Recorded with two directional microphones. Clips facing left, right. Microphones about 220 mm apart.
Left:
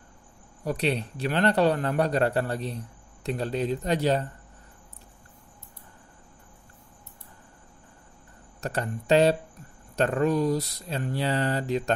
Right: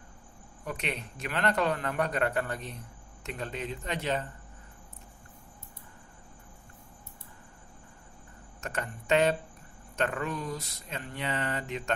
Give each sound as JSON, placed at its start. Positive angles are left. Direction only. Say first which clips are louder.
{"t": 0.7, "sound": "speech", "louder": "left 9 dB", "side_deg": 35}
{"t": 8.5, "sound": "speech", "louder": "left 6 dB", "side_deg": 35}